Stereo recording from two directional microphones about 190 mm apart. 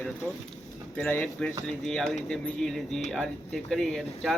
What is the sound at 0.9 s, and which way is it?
Speech, 10° left (ahead or behind).